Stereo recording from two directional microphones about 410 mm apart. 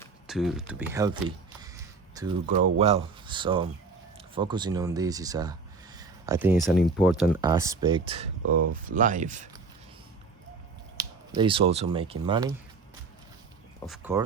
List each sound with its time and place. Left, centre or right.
0.0 s speech: centre
1.6 s a sound: centre
2.7 s speech: centre
6.0 s a sound: centre
7.0 s speech: centre
11.3 s speech: centre
13.7 s speech: centre